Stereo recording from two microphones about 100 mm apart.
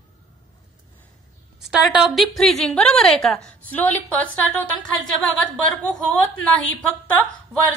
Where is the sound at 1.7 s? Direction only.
Centre (ahead or behind).